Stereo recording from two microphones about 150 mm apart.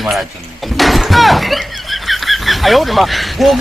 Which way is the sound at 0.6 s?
Centre (ahead or behind).